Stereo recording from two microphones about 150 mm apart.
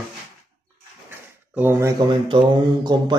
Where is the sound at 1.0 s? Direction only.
15° right (ahead or behind).